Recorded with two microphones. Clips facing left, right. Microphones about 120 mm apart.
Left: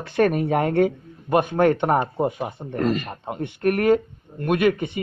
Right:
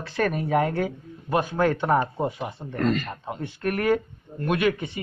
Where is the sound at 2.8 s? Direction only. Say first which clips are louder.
Left 1 dB; 5° left (ahead or behind).